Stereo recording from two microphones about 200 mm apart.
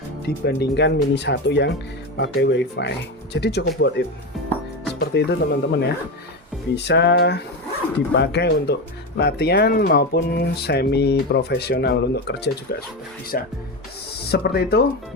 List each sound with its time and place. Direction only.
0.3 s speech: 55° left (ahead or behind)